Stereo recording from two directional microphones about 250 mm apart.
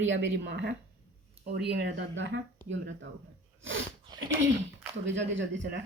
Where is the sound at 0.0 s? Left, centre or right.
Right.